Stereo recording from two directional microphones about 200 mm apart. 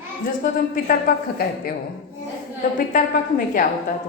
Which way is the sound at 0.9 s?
45° left (ahead or behind).